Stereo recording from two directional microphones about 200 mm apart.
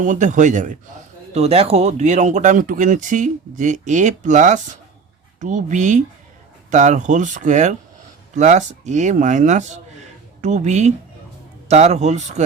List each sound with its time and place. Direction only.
0.0 s speech: 40° right (ahead or behind)